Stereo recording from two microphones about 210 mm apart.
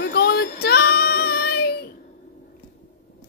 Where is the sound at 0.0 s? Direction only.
50° left (ahead or behind).